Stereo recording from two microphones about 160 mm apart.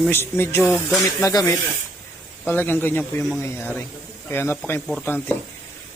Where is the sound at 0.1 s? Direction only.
15° left (ahead or behind).